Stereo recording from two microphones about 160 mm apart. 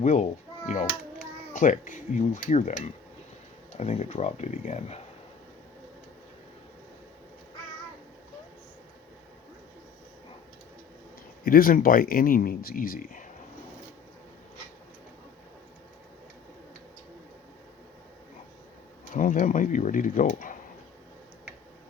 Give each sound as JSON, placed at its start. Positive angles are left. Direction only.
{"t": 0.0, "sound": "speech", "side_deg": 45}
{"t": 1.5, "sound": "speech", "side_deg": 55}
{"t": 11.4, "sound": "speech", "side_deg": 60}
{"t": 19.1, "sound": "speech", "side_deg": 55}